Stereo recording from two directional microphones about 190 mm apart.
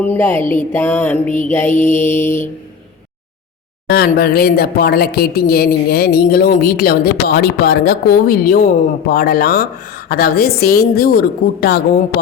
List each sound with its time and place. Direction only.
0.0 s music: 10° left (ahead or behind)
3.8 s a woman's voice: 55° left (ahead or behind)